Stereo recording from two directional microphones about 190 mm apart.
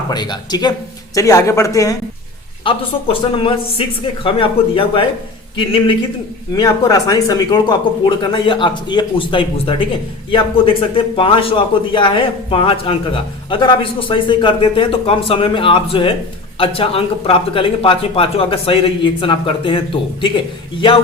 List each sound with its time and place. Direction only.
0.1 s speech: 20° left (ahead or behind)